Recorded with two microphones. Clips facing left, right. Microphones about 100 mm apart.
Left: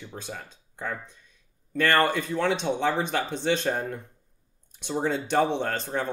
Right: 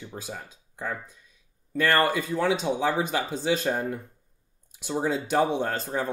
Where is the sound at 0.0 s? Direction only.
5° right (ahead or behind).